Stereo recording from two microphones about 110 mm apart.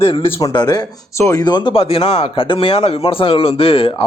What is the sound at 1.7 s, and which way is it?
Speech, 55° left (ahead or behind).